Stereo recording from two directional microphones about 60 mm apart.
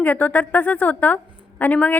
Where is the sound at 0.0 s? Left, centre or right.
Left.